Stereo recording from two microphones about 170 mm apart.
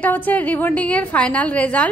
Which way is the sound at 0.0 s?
10° left (ahead or behind).